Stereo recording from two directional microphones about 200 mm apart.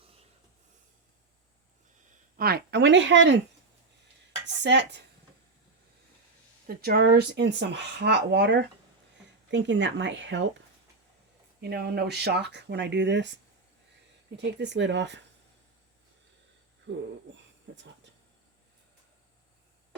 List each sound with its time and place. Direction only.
2.3 s speech: 50° right (ahead or behind)
4.4 s speech: 60° right (ahead or behind)
6.7 s speech: 50° right (ahead or behind)
11.6 s speech: 55° right (ahead or behind)
16.9 s speech: 60° right (ahead or behind)
17.7 s speech: 80° right